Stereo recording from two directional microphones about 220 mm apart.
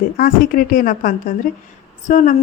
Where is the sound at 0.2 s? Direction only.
40° left (ahead or behind).